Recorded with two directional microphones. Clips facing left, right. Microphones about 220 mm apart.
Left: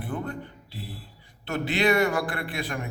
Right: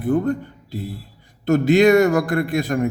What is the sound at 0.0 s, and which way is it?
A man's voice, 45° right (ahead or behind).